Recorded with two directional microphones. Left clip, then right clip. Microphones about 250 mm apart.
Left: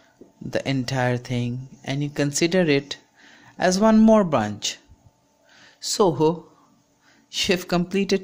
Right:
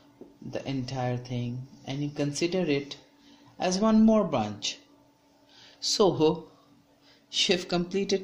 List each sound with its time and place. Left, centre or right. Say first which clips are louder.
0.5 s speech: left 9 dB; left
5.5 s a sound: even; left
7.3 s speech: left 3 dB; left